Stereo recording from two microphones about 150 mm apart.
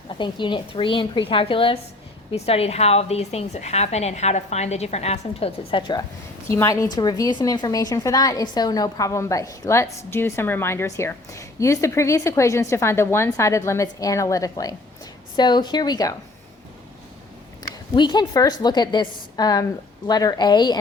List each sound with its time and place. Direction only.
0.2 s a woman's voice: 30° left (ahead or behind)
6.5 s a woman's voice: 20° left (ahead or behind)
17.6 s a woman's voice: 30° left (ahead or behind)